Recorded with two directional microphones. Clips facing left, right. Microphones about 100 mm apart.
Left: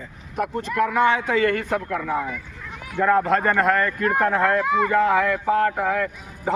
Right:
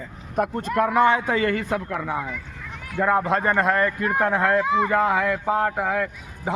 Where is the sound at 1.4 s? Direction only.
25° right (ahead or behind).